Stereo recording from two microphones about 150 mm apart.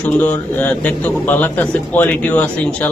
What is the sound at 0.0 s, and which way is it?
A man's voice, 10° left (ahead or behind).